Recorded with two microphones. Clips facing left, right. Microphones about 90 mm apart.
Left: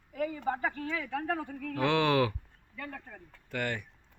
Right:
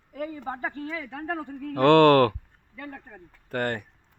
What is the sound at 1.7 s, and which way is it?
Speech, 60° right (ahead or behind).